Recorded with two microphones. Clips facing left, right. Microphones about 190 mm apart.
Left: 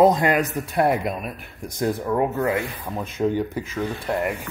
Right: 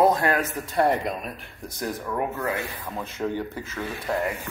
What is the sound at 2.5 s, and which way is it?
Speech, 15° left (ahead or behind).